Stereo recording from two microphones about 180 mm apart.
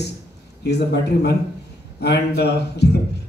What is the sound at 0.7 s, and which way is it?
A man's voice, 65° left (ahead or behind).